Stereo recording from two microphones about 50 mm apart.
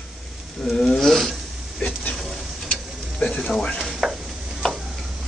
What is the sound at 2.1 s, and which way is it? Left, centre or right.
Stir, centre.